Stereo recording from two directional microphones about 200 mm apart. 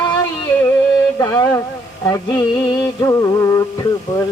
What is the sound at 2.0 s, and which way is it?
Music, 20° left (ahead or behind).